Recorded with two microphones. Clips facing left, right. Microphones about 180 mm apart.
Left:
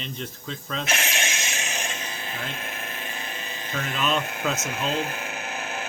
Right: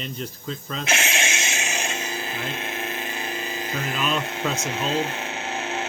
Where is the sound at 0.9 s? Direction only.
30° right (ahead or behind).